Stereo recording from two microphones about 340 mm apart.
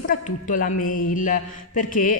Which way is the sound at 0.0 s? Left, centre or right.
Left.